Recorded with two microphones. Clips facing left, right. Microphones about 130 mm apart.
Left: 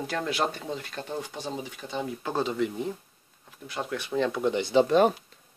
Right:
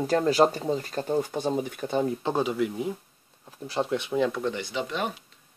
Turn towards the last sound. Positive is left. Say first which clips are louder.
# left 10 dB
turn(degrees=40)  # may be behind; listen again after turning